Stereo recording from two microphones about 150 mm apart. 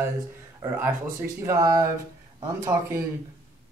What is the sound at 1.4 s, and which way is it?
Speech, 20° right (ahead or behind).